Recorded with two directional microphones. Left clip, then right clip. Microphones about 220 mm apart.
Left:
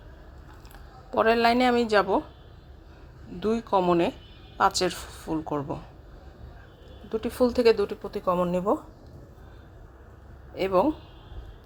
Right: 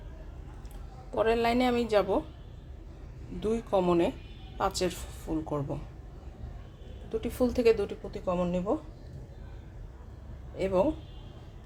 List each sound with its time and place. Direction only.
1.1 s speech: 15° left (ahead or behind)
3.4 s speech: 10° left (ahead or behind)
7.1 s speech: 10° left (ahead or behind)
10.5 s speech: 20° left (ahead or behind)